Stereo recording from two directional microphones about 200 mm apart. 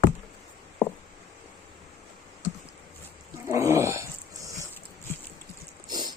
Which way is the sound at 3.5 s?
15° right (ahead or behind).